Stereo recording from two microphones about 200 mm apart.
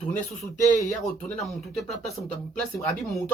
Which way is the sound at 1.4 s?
Centre (ahead or behind).